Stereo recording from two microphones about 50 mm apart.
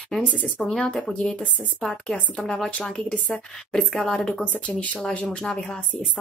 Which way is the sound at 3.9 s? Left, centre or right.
Centre.